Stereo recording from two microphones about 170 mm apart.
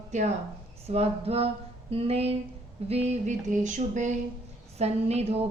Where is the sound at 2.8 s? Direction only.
40° right (ahead or behind).